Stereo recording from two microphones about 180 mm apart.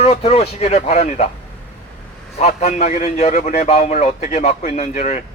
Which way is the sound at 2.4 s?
35° left (ahead or behind).